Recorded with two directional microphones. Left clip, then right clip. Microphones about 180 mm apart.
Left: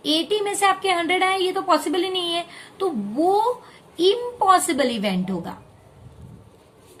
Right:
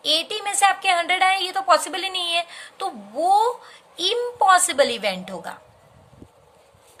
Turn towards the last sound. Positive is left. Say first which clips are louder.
# even
turn(degrees=-40)  # may be behind; listen again after turning